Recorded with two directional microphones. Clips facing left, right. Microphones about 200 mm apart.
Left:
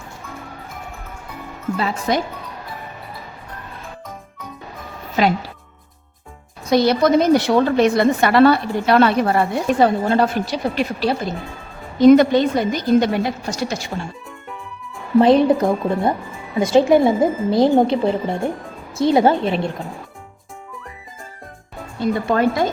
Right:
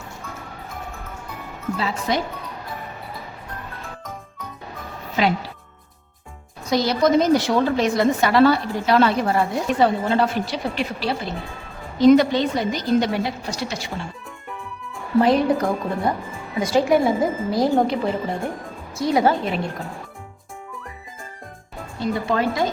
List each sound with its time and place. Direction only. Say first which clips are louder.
1.8 s a woman's voice: left 3 dB; 50° left (ahead or behind)
5.2 s a woman's voice: left 3 dB; 45° left (ahead or behind)
6.7 s a woman's voice: left 4 dB; 60° left (ahead or behind); by 13.9 s 45° left (ahead or behind)
15.2 s a woman's voice: left 4 dB; 25° left (ahead or behind)
22.0 s a woman's voice: left 4 dB; 50° left (ahead or behind)